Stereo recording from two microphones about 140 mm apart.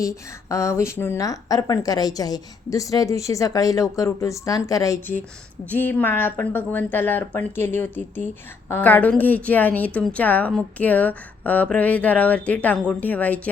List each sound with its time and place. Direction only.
0.0 s a woman's voice: 20° left (ahead or behind)